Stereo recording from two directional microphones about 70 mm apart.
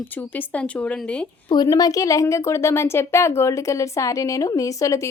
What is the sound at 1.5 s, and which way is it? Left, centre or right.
A woman's voice, left.